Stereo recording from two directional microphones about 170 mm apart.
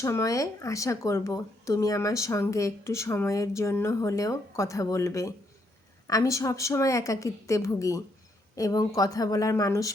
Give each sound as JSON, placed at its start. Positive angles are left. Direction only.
{"t": 0.0, "sound": "a woman's voice", "side_deg": 20}